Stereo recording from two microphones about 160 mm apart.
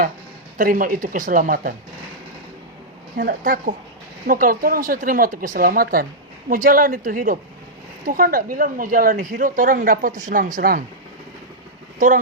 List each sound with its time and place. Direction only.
0.6 s a woman's voice: 60° right (ahead or behind)
3.2 s a woman's voice: 60° right (ahead or behind)
11.9 s speech: 55° right (ahead or behind)